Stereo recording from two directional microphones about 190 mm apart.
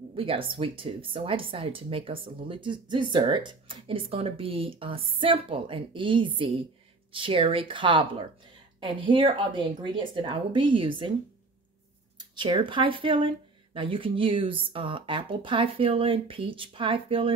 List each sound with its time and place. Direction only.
0.1 s speech: 30° right (ahead or behind)
12.2 s speech: 25° right (ahead or behind)